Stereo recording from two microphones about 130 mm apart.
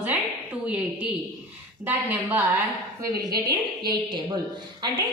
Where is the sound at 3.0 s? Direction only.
30° right (ahead or behind).